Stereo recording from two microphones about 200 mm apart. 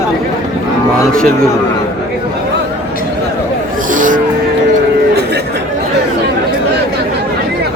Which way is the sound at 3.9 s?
40° right (ahead or behind).